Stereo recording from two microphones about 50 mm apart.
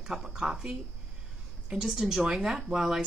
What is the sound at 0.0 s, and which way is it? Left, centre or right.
Speech, centre.